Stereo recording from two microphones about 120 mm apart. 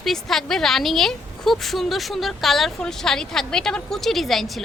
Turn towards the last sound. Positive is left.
turn(degrees=0)  # may be behind; listen again after turning